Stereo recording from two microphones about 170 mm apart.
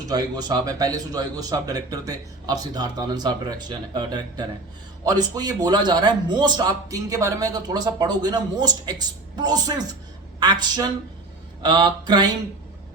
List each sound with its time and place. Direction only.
0.1 s a man's voice: 25° right (ahead or behind)